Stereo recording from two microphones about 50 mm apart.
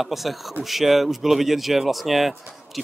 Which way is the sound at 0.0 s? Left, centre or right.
Centre.